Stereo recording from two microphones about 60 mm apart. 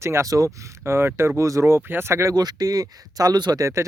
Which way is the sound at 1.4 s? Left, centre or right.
Right.